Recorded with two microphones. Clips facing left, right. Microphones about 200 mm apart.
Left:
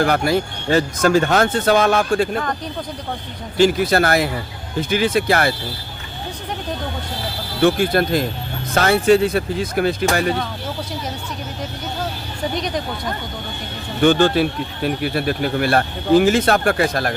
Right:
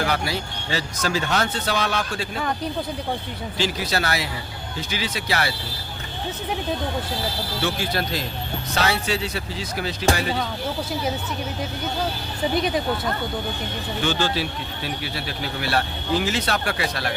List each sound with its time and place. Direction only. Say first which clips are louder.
0.0 s speech: left 8 dB; 50° left (ahead or behind)
3.6 s speech: left 10 dB; 50° left (ahead or behind)
7.6 s speech: left 11 dB; 55° left (ahead or behind)
12.5 s speech: right 2 dB; 5° right (ahead or behind)
14.0 s speech: left 10 dB; 55° left (ahead or behind)